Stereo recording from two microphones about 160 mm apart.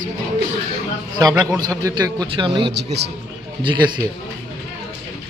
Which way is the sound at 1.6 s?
20° right (ahead or behind).